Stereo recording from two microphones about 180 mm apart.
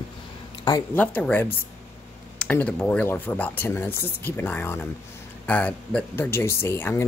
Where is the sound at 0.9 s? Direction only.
10° left (ahead or behind).